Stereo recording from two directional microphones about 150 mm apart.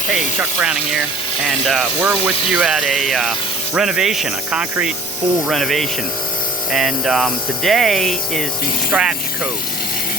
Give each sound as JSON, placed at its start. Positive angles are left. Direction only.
{"t": 0.1, "sound": "speech", "side_deg": -5}